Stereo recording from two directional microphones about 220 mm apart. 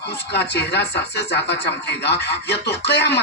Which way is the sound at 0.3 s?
50° left (ahead or behind).